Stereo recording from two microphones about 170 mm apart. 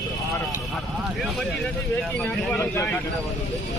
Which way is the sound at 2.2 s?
10° left (ahead or behind).